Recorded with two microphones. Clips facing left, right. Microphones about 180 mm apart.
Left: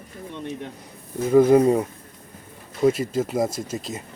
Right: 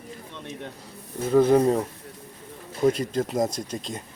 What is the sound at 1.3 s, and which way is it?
Speech, 10° left (ahead or behind).